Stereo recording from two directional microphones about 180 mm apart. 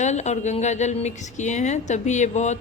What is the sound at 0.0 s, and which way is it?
A woman's voice, 40° left (ahead or behind).